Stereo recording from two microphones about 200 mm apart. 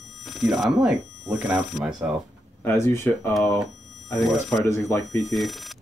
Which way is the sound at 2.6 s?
15° left (ahead or behind).